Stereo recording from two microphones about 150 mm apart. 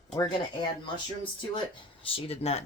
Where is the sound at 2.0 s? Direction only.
40° left (ahead or behind).